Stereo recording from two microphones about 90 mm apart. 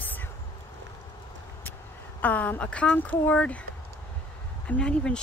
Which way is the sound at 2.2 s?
20° left (ahead or behind).